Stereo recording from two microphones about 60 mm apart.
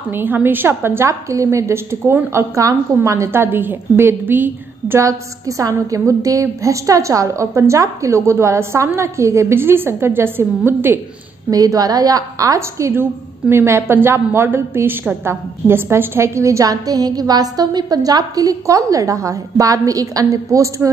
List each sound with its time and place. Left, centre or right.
0.1 s a woman's voice: right
3.5 s a woman's voice: right
5.9 s a woman's voice: right
11.5 s a woman's voice: right
12.5 s a woman's voice: right
12.9 s a woman's voice: right
16.6 s a woman's voice: right
19.6 s a woman's voice: right